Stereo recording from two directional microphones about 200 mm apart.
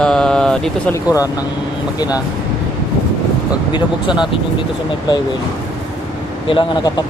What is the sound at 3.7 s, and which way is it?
Speech, 25° left (ahead or behind).